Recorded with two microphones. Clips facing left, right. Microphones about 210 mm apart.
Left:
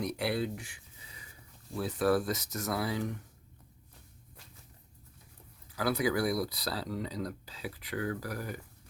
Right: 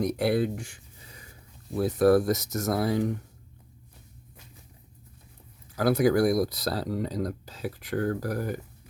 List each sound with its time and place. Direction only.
0.0 s speech: 45° right (ahead or behind)
5.7 s speech: 45° right (ahead or behind)